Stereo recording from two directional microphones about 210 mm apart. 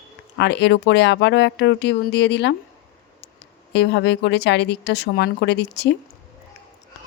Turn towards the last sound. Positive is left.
turn(degrees=55)  # may be behind; listen again after turning